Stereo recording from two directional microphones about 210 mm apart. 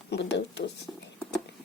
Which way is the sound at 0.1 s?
55° left (ahead or behind).